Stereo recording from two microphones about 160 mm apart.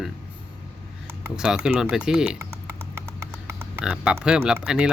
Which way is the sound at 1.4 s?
5° right (ahead or behind).